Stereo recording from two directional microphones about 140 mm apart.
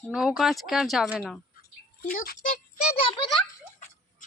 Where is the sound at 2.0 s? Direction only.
70° left (ahead or behind).